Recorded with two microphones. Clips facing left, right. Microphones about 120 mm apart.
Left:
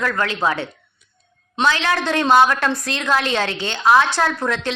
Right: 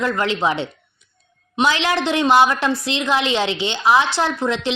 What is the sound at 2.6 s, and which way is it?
Speech, 15° right (ahead or behind).